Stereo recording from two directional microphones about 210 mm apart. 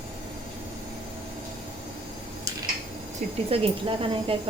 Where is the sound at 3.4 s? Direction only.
30° right (ahead or behind).